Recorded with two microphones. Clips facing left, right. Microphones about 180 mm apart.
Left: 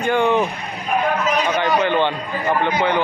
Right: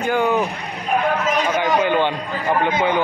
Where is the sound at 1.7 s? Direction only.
10° right (ahead or behind).